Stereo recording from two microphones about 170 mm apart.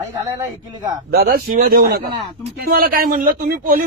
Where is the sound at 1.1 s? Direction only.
60° right (ahead or behind).